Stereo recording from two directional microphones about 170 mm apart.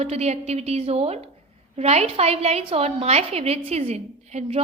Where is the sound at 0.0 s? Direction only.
40° right (ahead or behind).